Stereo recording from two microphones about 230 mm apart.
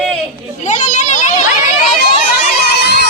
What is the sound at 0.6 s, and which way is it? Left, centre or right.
Children playing, left.